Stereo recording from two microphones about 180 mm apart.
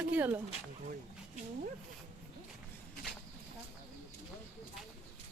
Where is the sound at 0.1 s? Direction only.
10° right (ahead or behind).